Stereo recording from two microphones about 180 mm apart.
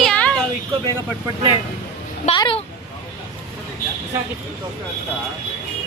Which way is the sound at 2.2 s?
25° left (ahead or behind).